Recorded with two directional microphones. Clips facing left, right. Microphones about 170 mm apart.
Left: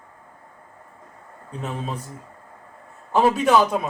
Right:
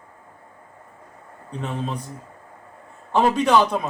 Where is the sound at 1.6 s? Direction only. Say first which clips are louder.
Right 2 dB; 5° left (ahead or behind).